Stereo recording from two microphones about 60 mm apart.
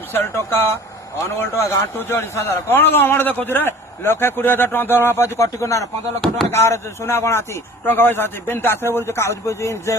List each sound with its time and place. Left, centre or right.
0.1 s speech: left